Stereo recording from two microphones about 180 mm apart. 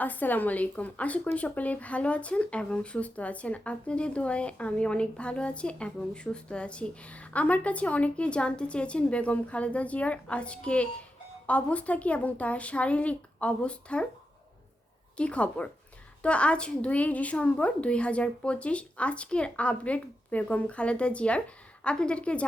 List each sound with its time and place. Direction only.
0.0 s a woman's voice: 10° left (ahead or behind)
15.2 s a woman's voice: 5° left (ahead or behind)